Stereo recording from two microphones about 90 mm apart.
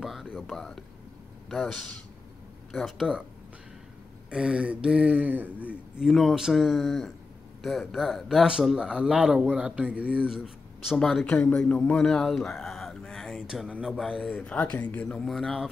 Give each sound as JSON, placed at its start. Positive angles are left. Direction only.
{"t": 0.0, "sound": "a sound", "side_deg": -5}
{"t": 0.4, "sound": "speech", "side_deg": 5}
{"t": 4.3, "sound": "speech", "side_deg": -10}
{"t": 5.9, "sound": "speech", "side_deg": 0}
{"t": 13.5, "sound": "speech", "side_deg": -10}
{"t": 13.9, "sound": "speech", "side_deg": 5}